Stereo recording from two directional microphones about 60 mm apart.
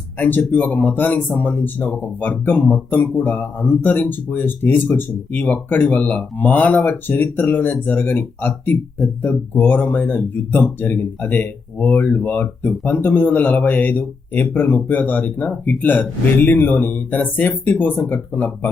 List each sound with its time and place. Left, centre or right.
0.2 s speech: left